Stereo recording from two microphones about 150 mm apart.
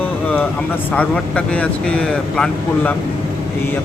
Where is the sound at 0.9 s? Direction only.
10° left (ahead or behind).